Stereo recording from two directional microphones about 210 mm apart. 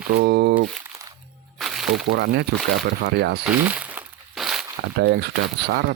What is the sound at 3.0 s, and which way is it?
Speech, 55° right (ahead or behind).